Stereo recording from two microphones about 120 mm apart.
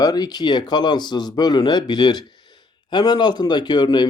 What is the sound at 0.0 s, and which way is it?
Speech, 35° left (ahead or behind).